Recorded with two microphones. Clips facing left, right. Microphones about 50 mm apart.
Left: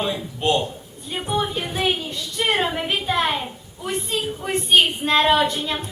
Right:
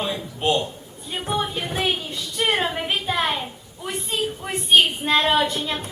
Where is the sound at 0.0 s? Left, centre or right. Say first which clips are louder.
Left 1 dB; centre.